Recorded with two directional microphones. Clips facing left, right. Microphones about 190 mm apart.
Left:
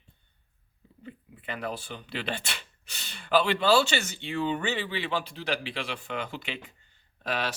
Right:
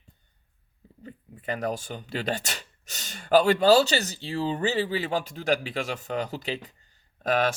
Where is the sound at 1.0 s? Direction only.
40° right (ahead or behind).